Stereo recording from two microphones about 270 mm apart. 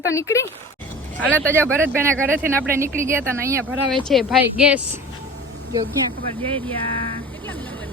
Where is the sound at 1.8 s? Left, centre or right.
Centre.